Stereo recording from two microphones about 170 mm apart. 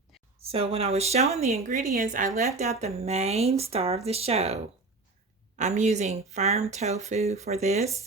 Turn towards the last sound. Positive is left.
turn(degrees=-40)  # may be behind; listen again after turning